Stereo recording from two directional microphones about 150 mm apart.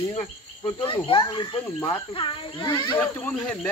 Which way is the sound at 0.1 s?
35° left (ahead or behind).